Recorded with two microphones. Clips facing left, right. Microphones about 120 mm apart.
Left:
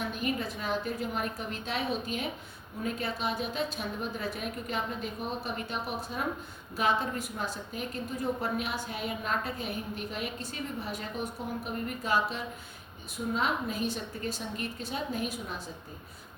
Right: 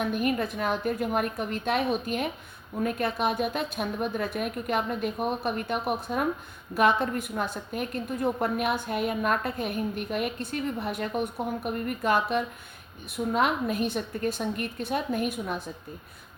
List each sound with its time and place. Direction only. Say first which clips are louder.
0.1 s a woman's voice: right 6 dB; 55° right (ahead or behind)